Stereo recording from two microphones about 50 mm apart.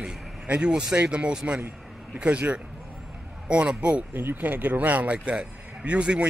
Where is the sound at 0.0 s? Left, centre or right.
Right.